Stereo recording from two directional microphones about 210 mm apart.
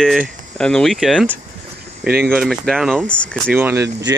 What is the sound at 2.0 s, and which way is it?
Speech, 45° right (ahead or behind).